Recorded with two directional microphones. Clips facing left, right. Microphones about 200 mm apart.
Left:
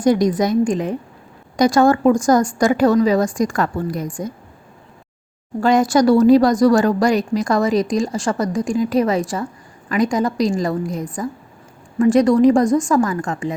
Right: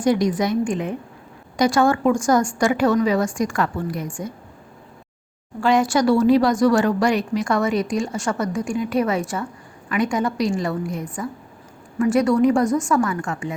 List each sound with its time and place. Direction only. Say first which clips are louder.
0.0 s speech: left 3 dB; 40° left (ahead or behind)
5.5 s speech: left 4 dB; 40° left (ahead or behind)